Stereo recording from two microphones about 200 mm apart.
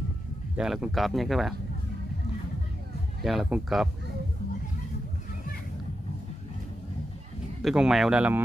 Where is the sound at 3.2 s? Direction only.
Centre (ahead or behind).